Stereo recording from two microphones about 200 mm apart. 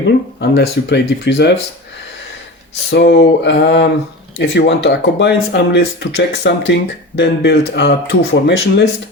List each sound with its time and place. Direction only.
0.3 s speech: 55° left (ahead or behind)
2.9 s speech: 60° left (ahead or behind)